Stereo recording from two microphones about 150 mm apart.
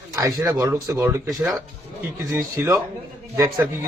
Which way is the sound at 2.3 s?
20° right (ahead or behind).